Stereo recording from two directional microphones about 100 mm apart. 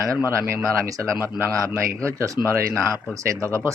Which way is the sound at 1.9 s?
35° right (ahead or behind).